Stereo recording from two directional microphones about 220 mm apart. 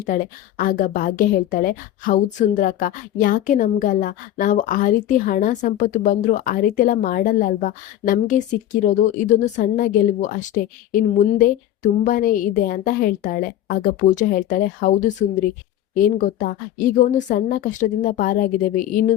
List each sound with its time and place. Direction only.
0.0 s a woman's voice: 40° left (ahead or behind)